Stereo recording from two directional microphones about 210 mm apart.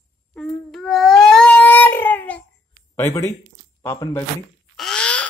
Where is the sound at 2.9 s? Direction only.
15° left (ahead or behind).